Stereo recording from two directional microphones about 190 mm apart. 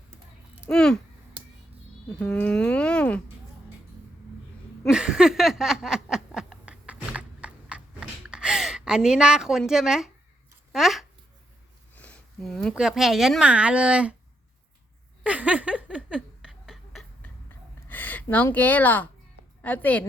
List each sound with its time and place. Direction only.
0.7 s speech: 5° left (ahead or behind)
2.1 s speech: 5° left (ahead or behind)
4.8 s a sound: 5° right (ahead or behind)
10.7 s speech: centre (ahead or behind)
15.2 s a sound: 5° right (ahead or behind)
17.8 s a woman's voice: 10° left (ahead or behind)